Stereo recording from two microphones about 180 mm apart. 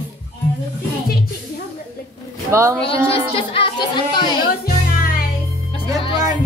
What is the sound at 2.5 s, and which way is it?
Speech, 15° right (ahead or behind).